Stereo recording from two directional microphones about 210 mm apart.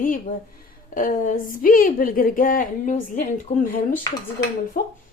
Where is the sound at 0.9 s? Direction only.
40° left (ahead or behind).